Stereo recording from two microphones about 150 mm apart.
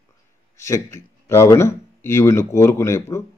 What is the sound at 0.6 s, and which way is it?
A man's voice, 20° left (ahead or behind).